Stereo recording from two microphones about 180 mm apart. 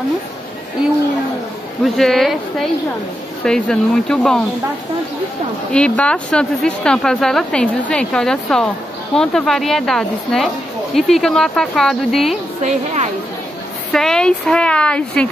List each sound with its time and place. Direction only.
2.0 s a woman's voice: centre (ahead or behind)
5.7 s a woman's voice: 5° left (ahead or behind)
12.6 s a woman's voice: 40° right (ahead or behind)
13.9 s a woman's voice: 5° left (ahead or behind)